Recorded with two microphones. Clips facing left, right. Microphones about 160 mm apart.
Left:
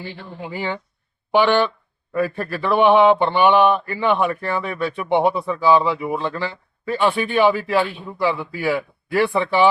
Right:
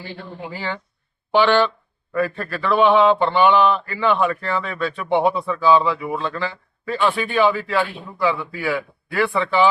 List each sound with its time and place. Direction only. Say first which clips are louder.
0.5 s mantra: left 4 dB; 15° left (ahead or behind)